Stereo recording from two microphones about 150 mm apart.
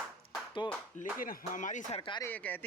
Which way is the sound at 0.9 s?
65° left (ahead or behind).